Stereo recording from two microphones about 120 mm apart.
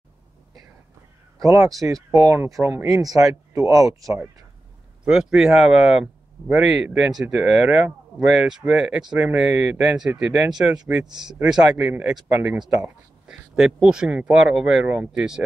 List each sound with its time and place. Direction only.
1.4 s speech: 25° right (ahead or behind)
5.0 s speech: 5° right (ahead or behind)